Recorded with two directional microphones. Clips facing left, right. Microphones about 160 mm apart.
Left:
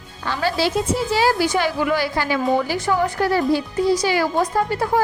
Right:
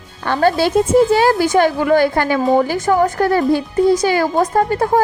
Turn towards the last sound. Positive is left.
turn(degrees=-50)  # may be behind; listen again after turning